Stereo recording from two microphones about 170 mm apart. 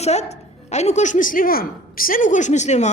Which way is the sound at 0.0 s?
40° left (ahead or behind).